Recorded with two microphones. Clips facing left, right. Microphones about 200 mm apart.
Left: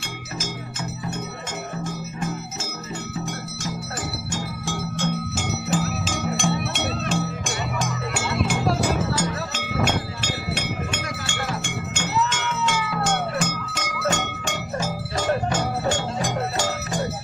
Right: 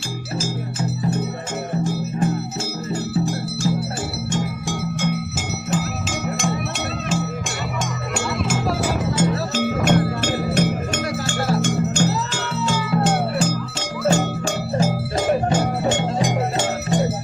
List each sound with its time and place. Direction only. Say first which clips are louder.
0.3 s music: right 7 dB; 30° right (ahead or behind)
4.3 s music: right 5 dB; 20° right (ahead or behind)
5.7 s music: right 2 dB; centre (ahead or behind)
9.1 s music: right 6 dB; 25° right (ahead or behind)
9.6 s music: right 7 dB; 50° right (ahead or behind); by 14.8 s 35° right (ahead or behind)
15.4 s music: right 4 dB; 20° right (ahead or behind)